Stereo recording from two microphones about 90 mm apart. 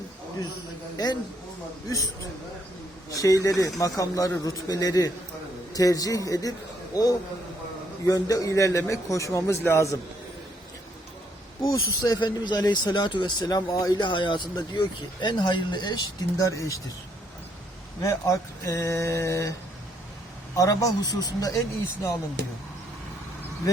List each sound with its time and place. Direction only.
0.9 s speech: 50° left (ahead or behind)
3.1 s speech: 40° left (ahead or behind)
11.6 s speech: 40° left (ahead or behind)
14.0 s speech: 60° left (ahead or behind)
16.4 s speech: 35° left (ahead or behind)
18.0 s speech: 35° left (ahead or behind)
20.6 s speech: 40° left (ahead or behind)